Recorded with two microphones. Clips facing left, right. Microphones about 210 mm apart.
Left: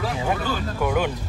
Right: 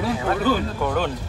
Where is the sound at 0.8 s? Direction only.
10° left (ahead or behind).